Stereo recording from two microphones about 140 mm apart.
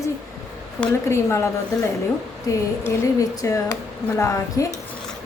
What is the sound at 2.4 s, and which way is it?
A woman's voice, 20° left (ahead or behind).